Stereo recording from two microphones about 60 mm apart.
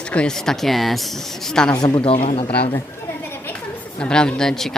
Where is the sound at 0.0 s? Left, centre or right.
Centre.